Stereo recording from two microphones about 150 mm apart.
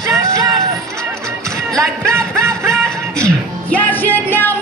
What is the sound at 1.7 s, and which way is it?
Music, 20° right (ahead or behind).